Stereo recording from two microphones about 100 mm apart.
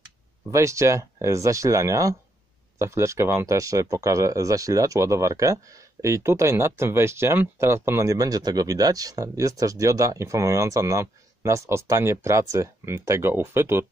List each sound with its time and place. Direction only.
0.5 s speech: 30° right (ahead or behind)